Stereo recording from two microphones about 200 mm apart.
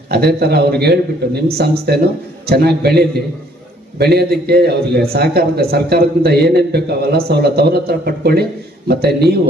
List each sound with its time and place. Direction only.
0.1 s a man's voice: 55° right (ahead or behind)